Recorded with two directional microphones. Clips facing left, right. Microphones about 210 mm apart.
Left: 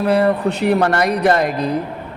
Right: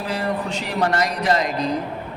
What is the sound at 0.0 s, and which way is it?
Speech, 60° left (ahead or behind).